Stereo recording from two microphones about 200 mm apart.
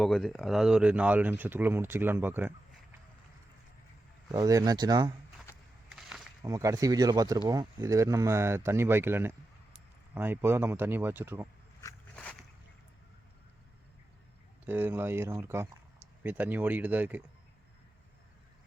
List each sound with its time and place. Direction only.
0.0 s speech: centre (ahead or behind)
4.3 s speech: 15° right (ahead or behind)
5.9 s a sound: 5° right (ahead or behind)
6.4 s speech: 15° right (ahead or behind)
12.1 s a sound: 5° left (ahead or behind)
14.7 s speech: 10° right (ahead or behind)